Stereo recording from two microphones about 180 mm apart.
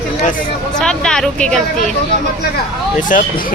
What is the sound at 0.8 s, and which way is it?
Speech, 5° left (ahead or behind).